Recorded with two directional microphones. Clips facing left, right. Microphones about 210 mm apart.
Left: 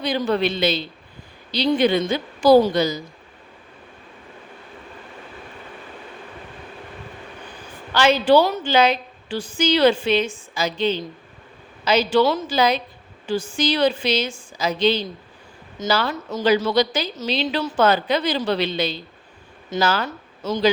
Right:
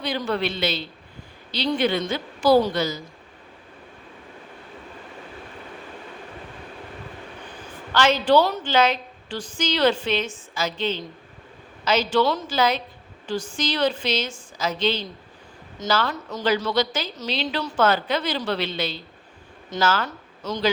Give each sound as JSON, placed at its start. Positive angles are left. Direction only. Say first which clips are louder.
{"t": 0.0, "sound": "a woman's voice", "louder": "left 4 dB", "side_deg": 15}
{"t": 7.9, "sound": "a woman's voice", "louder": "left 3 dB", "side_deg": 10}